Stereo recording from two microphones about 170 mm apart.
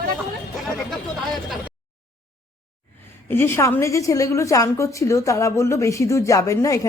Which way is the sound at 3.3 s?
15° left (ahead or behind).